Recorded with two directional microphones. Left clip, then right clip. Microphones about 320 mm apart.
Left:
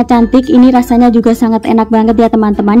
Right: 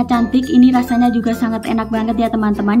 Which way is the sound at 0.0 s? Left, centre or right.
Centre.